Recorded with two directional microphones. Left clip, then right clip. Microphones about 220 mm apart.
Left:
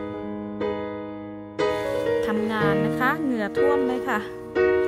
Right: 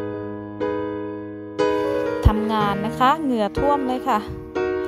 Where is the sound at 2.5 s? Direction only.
15° right (ahead or behind).